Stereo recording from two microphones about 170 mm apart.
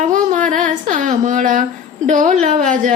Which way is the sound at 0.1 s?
50° right (ahead or behind).